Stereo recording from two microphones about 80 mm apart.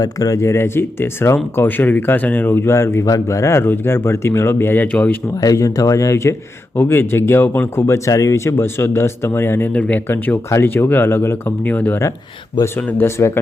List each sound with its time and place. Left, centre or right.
0.0 s a man's voice: left
4.9 s speech: centre
5.4 s speech: left
6.7 s speech: left
7.9 s a man's voice: left
9.7 s speech: centre
13.1 s a man's voice: left